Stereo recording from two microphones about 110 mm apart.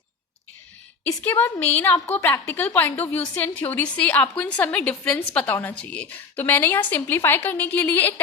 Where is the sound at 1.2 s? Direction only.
15° left (ahead or behind).